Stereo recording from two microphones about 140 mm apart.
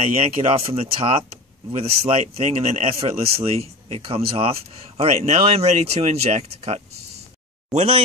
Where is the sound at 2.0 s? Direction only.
45° right (ahead or behind).